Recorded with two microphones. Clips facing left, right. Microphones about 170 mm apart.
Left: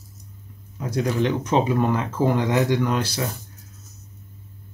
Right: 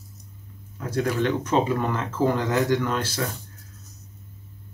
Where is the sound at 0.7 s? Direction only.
15° left (ahead or behind).